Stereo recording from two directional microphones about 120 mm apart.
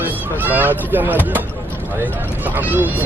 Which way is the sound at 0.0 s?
15° right (ahead or behind).